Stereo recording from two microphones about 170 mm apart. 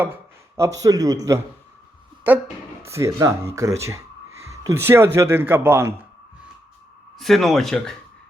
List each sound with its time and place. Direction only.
0.0 s a man's voice: 15° right (ahead or behind)
2.8 s speech: 15° right (ahead or behind)
7.2 s speech: centre (ahead or behind)